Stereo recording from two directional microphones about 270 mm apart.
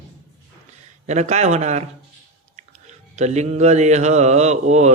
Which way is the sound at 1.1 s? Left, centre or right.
Right.